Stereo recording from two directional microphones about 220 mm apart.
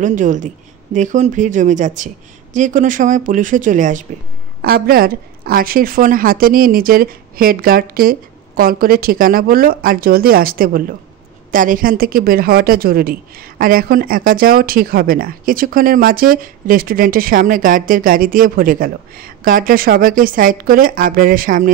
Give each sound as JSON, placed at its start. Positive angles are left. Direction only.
{"t": 0.0, "sound": "speech", "side_deg": -35}